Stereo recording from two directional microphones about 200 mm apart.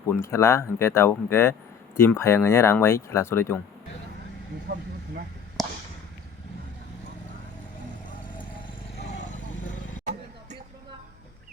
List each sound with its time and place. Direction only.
0.1 s speech: 15° left (ahead or behind)
5.6 s a sound: centre (ahead or behind)
8.3 s vehicle: 30° left (ahead or behind)